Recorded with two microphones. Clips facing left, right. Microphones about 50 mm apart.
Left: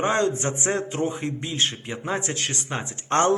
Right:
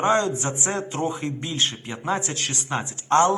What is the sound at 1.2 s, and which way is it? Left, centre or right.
Speech, centre.